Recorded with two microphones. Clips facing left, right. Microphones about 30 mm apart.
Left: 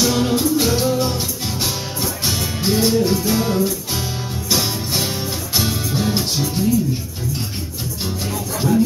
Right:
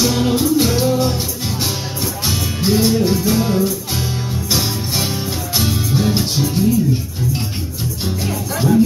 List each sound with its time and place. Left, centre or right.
0.0 s music: centre
2.2 s music: centre
8.5 s music: centre